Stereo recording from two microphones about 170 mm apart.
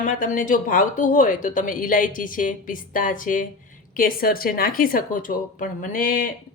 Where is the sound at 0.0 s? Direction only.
50° left (ahead or behind).